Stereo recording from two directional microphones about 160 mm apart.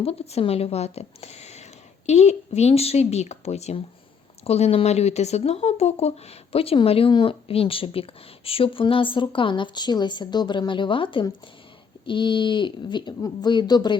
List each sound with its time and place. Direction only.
0.0 s speech: 40° left (ahead or behind)